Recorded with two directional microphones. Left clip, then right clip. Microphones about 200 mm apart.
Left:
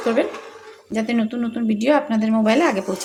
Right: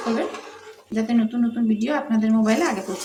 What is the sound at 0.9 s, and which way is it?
A woman's voice, 45° left (ahead or behind).